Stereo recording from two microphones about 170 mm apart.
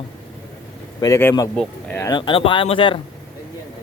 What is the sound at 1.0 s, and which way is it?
Speech, 15° left (ahead or behind).